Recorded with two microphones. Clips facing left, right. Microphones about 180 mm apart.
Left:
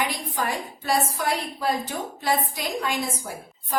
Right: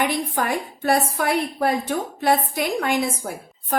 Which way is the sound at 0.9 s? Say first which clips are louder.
Right 4 dB; 60° right (ahead or behind).